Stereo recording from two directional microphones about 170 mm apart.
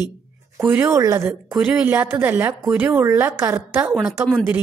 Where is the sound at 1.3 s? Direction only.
5° right (ahead or behind).